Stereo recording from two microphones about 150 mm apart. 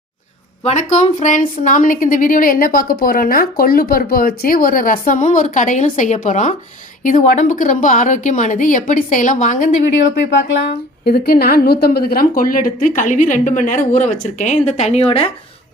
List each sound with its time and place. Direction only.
0.6 s speech: 50° left (ahead or behind)
11.0 s speech: 90° left; by 15.3 s 45° left (ahead or behind)